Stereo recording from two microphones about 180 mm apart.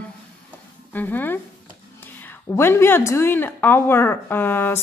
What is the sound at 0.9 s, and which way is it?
A woman's voice, 10° left (ahead or behind).